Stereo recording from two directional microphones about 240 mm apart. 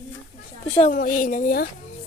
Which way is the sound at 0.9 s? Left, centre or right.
Left.